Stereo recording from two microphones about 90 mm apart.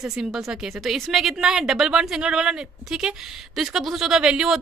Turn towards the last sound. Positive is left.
turn(degrees=-5)  # may be behind; listen again after turning